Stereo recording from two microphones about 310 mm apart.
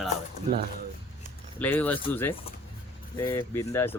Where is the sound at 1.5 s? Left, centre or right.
Centre.